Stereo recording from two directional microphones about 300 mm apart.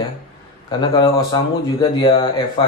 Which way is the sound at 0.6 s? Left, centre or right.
Centre.